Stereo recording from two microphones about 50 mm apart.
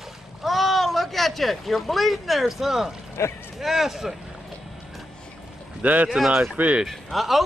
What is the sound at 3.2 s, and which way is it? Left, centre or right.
Speech, left.